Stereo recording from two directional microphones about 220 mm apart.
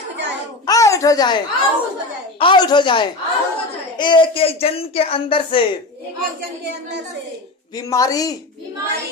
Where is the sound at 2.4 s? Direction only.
20° left (ahead or behind).